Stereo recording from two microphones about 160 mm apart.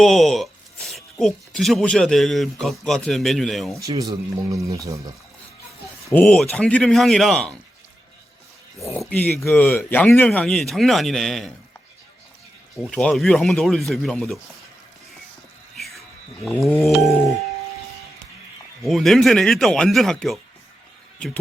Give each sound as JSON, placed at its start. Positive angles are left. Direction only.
{"t": 0.0, "sound": "speech", "side_deg": 0}
{"t": 3.8, "sound": "speech", "side_deg": -20}
{"t": 6.1, "sound": "speech", "side_deg": 5}
{"t": 9.0, "sound": "speech", "side_deg": 10}
{"t": 12.7, "sound": "speech", "side_deg": 5}
{"t": 15.7, "sound": "a sound", "side_deg": 0}
{"t": 18.9, "sound": "speech", "side_deg": 0}